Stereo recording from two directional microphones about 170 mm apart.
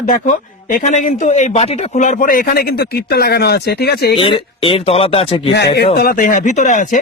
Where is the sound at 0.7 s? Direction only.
50° left (ahead or behind); by 4.2 s 70° left (ahead or behind).